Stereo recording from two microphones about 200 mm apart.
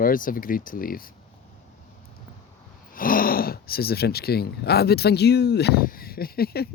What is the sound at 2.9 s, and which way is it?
Speech, 45° left (ahead or behind).